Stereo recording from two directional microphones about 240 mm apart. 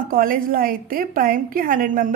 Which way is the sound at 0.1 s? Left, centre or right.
Right.